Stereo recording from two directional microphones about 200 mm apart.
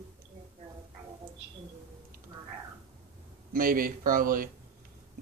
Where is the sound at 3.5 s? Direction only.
45° right (ahead or behind).